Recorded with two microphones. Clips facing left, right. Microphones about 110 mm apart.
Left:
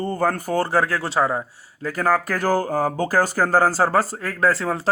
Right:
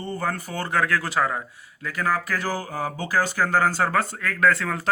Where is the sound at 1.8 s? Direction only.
40° left (ahead or behind).